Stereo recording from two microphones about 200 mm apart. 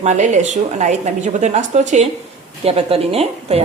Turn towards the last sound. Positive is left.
turn(degrees=-30)  # may be behind; listen again after turning